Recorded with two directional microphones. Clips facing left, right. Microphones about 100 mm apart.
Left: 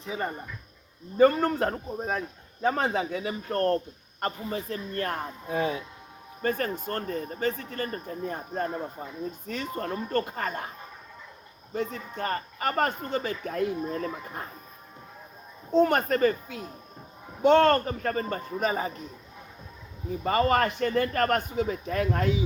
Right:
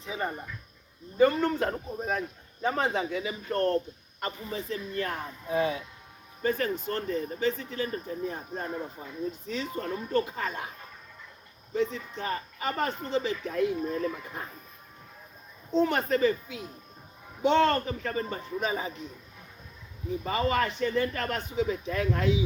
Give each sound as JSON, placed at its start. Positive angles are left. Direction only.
{"t": 1.2, "sound": "speech", "side_deg": 40}
{"t": 11.7, "sound": "speech", "side_deg": 45}
{"t": 15.7, "sound": "speech", "side_deg": 50}
{"t": 20.2, "sound": "speech", "side_deg": 50}